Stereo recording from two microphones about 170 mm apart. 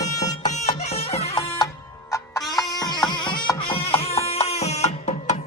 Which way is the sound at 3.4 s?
30° left (ahead or behind).